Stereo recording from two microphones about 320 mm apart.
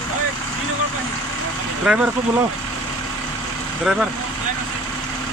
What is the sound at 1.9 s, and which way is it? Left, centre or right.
Speech, centre.